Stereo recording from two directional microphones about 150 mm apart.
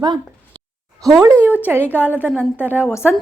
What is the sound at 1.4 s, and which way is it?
Speech, 15° left (ahead or behind).